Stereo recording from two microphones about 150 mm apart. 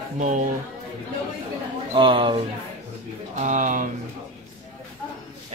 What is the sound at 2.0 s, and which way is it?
Speech, 35° right (ahead or behind).